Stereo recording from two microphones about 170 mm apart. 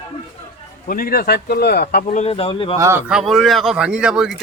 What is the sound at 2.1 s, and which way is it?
Speech, 35° left (ahead or behind).